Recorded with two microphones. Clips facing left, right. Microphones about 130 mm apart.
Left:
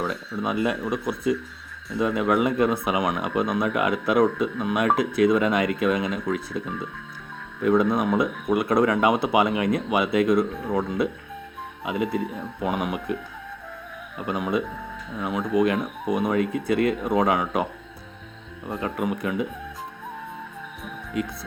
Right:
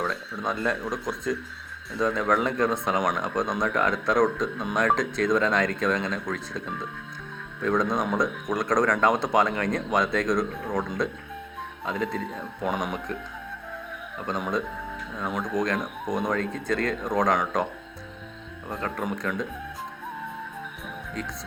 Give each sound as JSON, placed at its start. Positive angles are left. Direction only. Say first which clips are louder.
{"t": 0.0, "sound": "speech", "louder": "left 2 dB", "side_deg": 5}
{"t": 14.2, "sound": "speech", "louder": "left 3 dB", "side_deg": 10}
{"t": 18.7, "sound": "speech", "louder": "left 3 dB", "side_deg": 10}
{"t": 21.1, "sound": "speech", "louder": "left 7 dB", "side_deg": 10}